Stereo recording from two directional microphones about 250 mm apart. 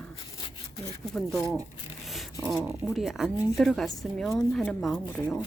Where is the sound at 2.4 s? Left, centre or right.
Centre.